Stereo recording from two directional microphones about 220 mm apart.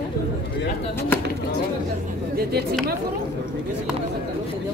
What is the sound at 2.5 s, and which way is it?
Speech, 45° right (ahead or behind).